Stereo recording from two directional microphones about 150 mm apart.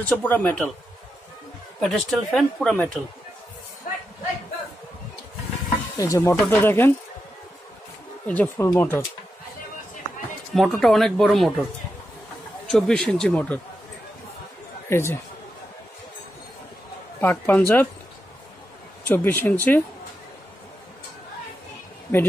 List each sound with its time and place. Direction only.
0.0 s speech: 10° left (ahead or behind)
1.8 s speech: centre (ahead or behind)
5.9 s speech: 20° left (ahead or behind)
6.3 s speech: 10° left (ahead or behind)
8.3 s speech: 10° left (ahead or behind)
10.5 s speech: centre (ahead or behind)
12.6 s speech: 5° left (ahead or behind)
14.9 s speech: 15° left (ahead or behind)
17.2 s speech: 15° left (ahead or behind)
19.0 s speech: 15° left (ahead or behind)